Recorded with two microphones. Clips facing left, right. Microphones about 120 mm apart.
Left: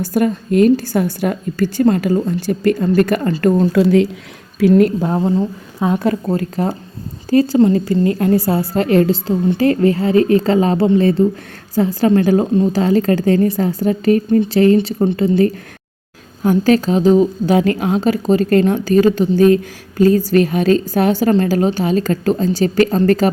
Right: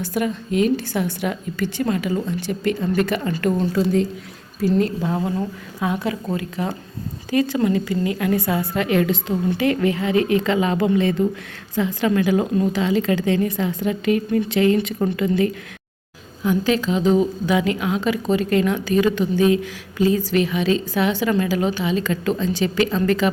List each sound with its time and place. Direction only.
0.0 s a woman's voice: 45° left (ahead or behind)
3.7 s speech: 75° left (ahead or behind)
4.6 s a woman's voice: 55° left (ahead or behind)
5.2 s a woman's voice: 30° left (ahead or behind)
12.5 s speech: 25° left (ahead or behind)
12.8 s a woman's voice: 45° left (ahead or behind)